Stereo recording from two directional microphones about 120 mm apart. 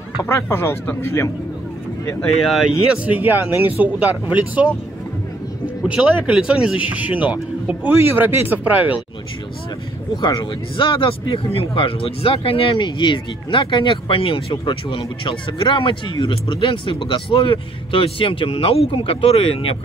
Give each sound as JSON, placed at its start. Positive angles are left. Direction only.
{"t": 0.2, "sound": "speech", "side_deg": 20}
{"t": 3.1, "sound": "speech", "side_deg": -15}
{"t": 5.9, "sound": "speech", "side_deg": -10}
{"t": 10.1, "sound": "speech", "side_deg": 40}